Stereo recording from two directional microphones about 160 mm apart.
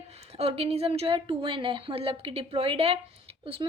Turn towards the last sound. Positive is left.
turn(degrees=-35)  # may be behind; listen again after turning